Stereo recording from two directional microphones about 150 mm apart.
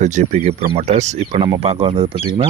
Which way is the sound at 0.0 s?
55° right (ahead or behind).